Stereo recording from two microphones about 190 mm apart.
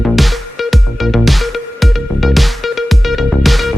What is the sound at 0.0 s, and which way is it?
Music, centre (ahead or behind).